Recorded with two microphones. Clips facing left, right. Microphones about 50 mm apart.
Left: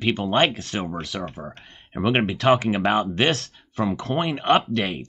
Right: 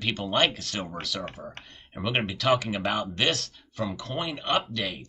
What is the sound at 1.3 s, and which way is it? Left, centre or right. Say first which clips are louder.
Speech: left 4 dB; left.